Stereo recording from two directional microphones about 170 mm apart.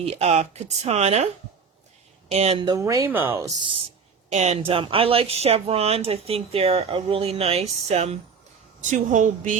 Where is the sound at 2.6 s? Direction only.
20° right (ahead or behind).